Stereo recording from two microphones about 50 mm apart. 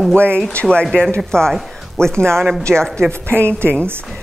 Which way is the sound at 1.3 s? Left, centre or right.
Centre.